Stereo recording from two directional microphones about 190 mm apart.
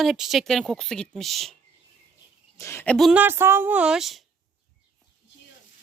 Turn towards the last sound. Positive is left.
turn(degrees=0)  # may be behind; listen again after turning